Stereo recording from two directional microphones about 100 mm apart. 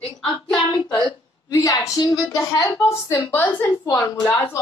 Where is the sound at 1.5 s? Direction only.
35° left (ahead or behind).